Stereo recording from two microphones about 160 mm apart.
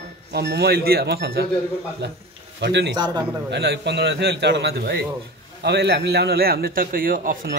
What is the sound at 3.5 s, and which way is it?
A man's voice, 90° right.